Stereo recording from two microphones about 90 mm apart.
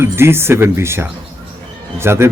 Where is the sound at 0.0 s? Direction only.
25° right (ahead or behind).